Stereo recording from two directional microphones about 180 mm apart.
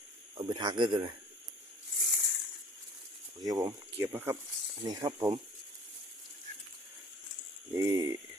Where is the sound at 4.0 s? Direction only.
15° right (ahead or behind).